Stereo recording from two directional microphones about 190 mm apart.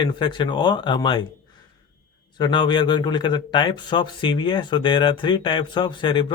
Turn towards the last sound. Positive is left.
turn(degrees=25)  # may be behind; listen again after turning